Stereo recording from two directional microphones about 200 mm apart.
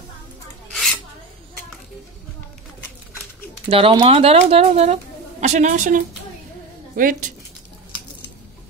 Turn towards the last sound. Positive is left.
turn(degrees=-45)  # may be behind; listen again after turning